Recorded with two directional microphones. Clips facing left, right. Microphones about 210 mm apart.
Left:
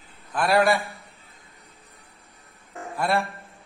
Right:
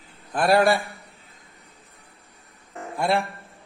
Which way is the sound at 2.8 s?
30° right (ahead or behind).